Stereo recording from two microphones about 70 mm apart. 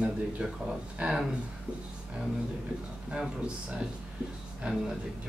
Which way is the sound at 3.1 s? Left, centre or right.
Centre.